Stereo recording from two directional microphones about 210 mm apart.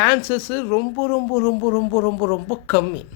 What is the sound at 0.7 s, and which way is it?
Speech, 10° left (ahead or behind).